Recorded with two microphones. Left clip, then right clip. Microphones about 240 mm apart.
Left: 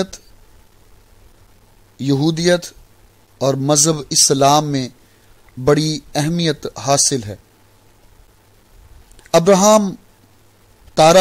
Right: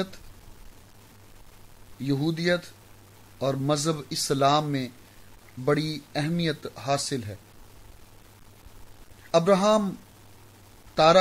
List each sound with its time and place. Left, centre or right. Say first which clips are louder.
2.0 s speech: left 10 dB; left
9.3 s speech: left 10 dB; left